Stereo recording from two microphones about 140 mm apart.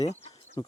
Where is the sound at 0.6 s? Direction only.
30° left (ahead or behind).